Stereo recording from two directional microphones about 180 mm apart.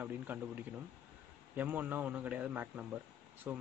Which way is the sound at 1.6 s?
10° right (ahead or behind).